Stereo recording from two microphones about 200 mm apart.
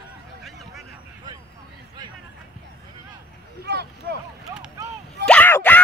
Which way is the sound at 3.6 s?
55° right (ahead or behind).